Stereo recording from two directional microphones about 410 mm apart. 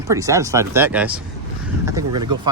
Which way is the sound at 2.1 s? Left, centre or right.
Right.